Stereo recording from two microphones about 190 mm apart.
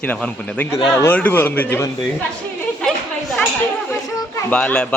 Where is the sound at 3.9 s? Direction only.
10° left (ahead or behind).